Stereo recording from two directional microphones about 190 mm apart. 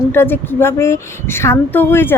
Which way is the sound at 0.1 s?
10° left (ahead or behind).